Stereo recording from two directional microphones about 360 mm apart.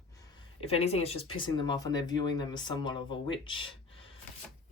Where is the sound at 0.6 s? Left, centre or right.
Centre.